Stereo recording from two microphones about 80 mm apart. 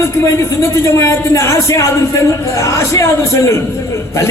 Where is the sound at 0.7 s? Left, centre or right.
Left.